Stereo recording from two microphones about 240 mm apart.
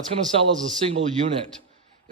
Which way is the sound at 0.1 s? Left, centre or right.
Right.